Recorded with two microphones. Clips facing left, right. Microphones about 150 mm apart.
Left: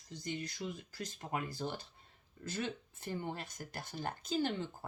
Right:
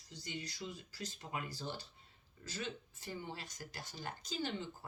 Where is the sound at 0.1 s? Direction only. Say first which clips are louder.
Left 5 dB; 50° left (ahead or behind).